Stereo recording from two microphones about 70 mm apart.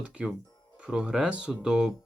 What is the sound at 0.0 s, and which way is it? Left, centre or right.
Speech, centre.